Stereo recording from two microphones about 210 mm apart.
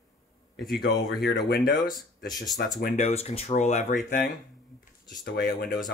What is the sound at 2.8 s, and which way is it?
Speech, 30° left (ahead or behind).